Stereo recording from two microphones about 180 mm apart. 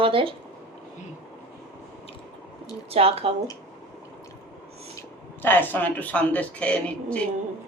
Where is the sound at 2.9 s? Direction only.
35° right (ahead or behind).